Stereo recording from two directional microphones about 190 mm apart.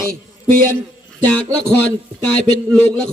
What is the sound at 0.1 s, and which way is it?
Speech, 50° right (ahead or behind).